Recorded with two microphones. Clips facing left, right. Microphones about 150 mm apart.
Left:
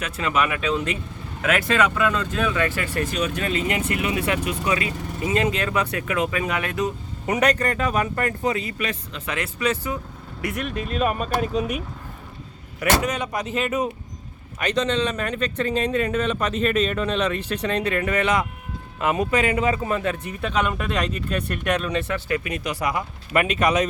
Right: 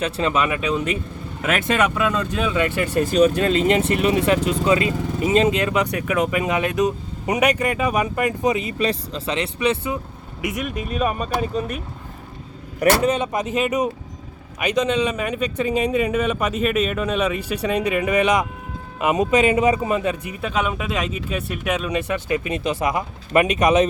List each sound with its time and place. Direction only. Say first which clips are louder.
0.0 s speech: right 3 dB; 30° right (ahead or behind)
3.1 s speech: right 9 dB; 35° right (ahead or behind); by 8.7 s 20° right (ahead or behind)
8.8 s speech: right 6 dB; 35° right (ahead or behind)
9.3 s speech: right 3 dB; 25° right (ahead or behind)
10.6 s speech: even; 5° right (ahead or behind)
12.8 s speech: right 5 dB; 25° right (ahead or behind)